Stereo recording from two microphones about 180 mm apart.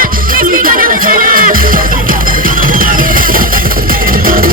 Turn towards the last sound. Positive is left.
turn(degrees=-50)  # may be behind; listen again after turning